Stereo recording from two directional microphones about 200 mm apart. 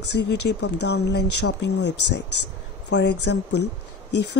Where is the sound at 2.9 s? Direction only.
60° left (ahead or behind).